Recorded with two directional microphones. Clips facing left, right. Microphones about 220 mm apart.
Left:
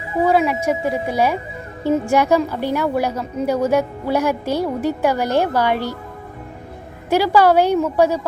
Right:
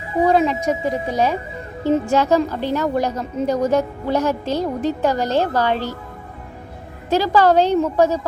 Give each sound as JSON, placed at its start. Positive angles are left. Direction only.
{"t": 0.3, "sound": "a woman's voice", "side_deg": 10}
{"t": 7.1, "sound": "a woman's voice", "side_deg": 10}